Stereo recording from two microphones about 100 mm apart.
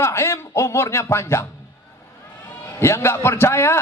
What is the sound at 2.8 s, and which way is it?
A man's voice, 25° left (ahead or behind).